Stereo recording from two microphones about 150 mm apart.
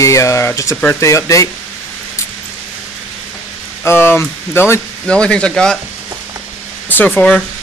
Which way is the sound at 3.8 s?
15° left (ahead or behind).